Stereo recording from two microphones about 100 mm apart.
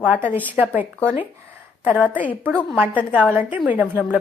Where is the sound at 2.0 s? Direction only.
15° right (ahead or behind).